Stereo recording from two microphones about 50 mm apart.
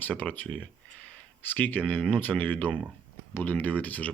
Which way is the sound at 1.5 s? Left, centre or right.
Left.